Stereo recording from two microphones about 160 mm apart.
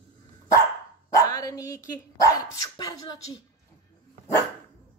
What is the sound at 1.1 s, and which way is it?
Speech, 20° left (ahead or behind).